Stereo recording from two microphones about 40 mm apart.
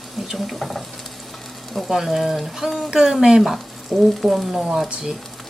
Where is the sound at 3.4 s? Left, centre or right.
Centre.